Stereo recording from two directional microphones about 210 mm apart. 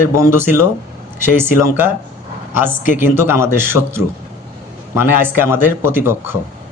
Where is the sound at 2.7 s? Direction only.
40° left (ahead or behind).